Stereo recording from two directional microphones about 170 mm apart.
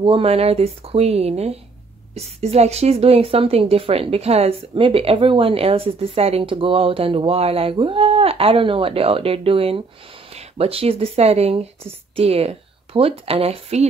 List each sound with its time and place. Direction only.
0.0 s speech: 35° right (ahead or behind)